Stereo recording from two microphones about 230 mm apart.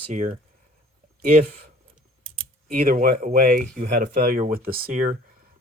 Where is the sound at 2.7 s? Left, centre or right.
Right.